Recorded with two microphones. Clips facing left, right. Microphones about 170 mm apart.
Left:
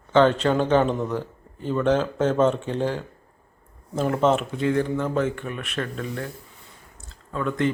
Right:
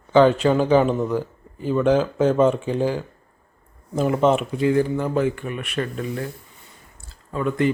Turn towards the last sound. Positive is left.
turn(degrees=-10)  # may be behind; listen again after turning